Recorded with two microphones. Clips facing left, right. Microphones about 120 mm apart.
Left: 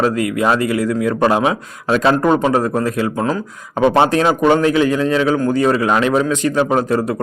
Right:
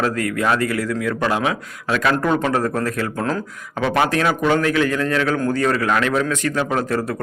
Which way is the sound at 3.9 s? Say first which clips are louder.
Left 5 dB; 25° left (ahead or behind).